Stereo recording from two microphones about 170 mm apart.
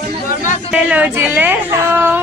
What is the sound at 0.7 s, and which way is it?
A woman's voice, 10° right (ahead or behind).